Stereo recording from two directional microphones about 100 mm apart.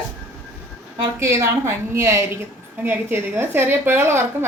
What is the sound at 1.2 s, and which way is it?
A woman's voice, 30° right (ahead or behind).